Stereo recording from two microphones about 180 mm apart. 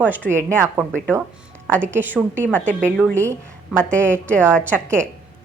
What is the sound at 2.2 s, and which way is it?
Speech, 10° right (ahead or behind).